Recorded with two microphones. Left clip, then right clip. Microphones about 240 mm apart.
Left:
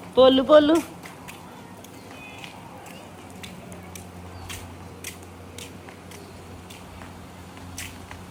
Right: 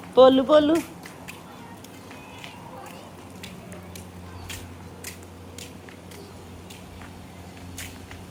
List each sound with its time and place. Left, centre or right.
0.1 s speech: centre
0.3 s a man's voice: centre